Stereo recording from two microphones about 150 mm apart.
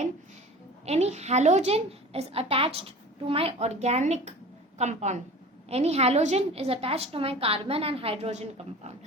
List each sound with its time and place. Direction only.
0.9 s a child's voice: 45° right (ahead or behind)